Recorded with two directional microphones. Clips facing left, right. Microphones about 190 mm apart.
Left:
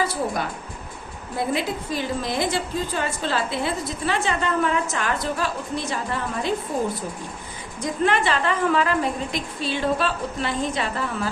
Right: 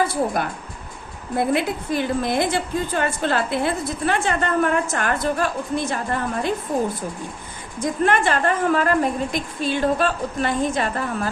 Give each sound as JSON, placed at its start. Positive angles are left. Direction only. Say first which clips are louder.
{"t": 1.4, "sound": "a woman's voice", "louder": "right 4 dB", "side_deg": -55}
{"t": 7.8, "sound": "a woman's voice", "louder": "right 2 dB", "side_deg": -50}